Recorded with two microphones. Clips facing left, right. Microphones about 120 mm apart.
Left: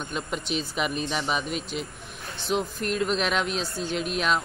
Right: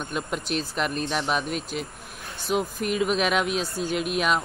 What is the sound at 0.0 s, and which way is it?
Speech, 5° right (ahead or behind).